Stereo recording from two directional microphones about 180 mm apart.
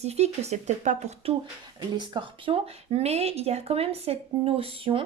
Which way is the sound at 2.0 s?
25° right (ahead or behind).